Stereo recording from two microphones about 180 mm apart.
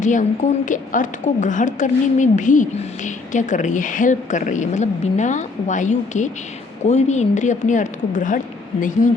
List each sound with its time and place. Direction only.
0.0 s a woman's voice: 45° left (ahead or behind)